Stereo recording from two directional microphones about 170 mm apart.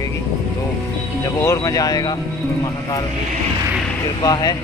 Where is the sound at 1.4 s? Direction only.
20° left (ahead or behind).